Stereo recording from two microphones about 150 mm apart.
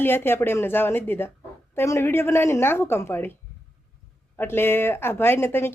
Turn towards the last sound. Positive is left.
turn(degrees=15)  # may be behind; listen again after turning